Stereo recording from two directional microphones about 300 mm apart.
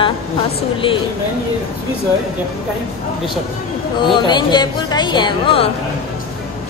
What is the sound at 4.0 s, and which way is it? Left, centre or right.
Speech, centre.